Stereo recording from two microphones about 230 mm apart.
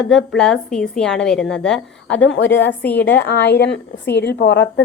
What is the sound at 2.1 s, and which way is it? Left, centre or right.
A woman's voice, left.